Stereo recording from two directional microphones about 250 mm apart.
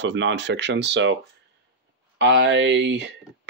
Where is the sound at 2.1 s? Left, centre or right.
Right.